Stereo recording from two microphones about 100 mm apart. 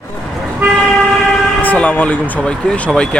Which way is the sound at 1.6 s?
15° left (ahead or behind).